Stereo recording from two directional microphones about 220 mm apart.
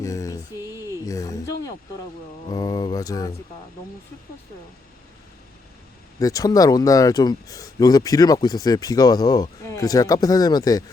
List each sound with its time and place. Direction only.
0.0 s a sound: 15° left (ahead or behind)
1.0 s speech: 15° left (ahead or behind)
6.1 s speech: 15° left (ahead or behind)